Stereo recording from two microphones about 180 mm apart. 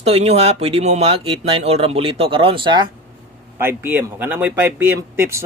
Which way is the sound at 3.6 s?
10° right (ahead or behind).